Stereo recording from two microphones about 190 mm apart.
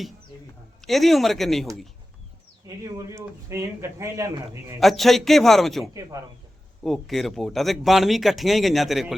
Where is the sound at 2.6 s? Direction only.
15° right (ahead or behind).